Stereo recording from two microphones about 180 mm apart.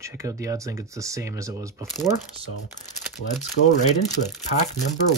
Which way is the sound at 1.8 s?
Centre (ahead or behind).